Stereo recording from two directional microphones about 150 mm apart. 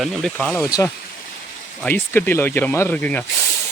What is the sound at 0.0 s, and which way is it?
Speech, centre (ahead or behind).